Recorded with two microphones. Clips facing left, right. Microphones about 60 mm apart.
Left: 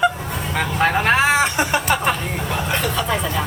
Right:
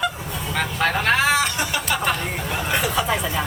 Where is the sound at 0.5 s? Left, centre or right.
Centre; by 1.8 s left.